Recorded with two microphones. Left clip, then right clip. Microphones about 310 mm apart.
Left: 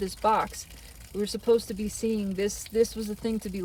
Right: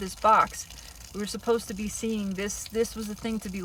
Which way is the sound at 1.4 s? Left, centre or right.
Right.